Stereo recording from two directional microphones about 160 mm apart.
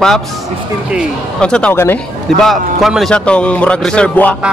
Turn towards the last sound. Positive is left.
turn(degrees=10)  # may be behind; listen again after turning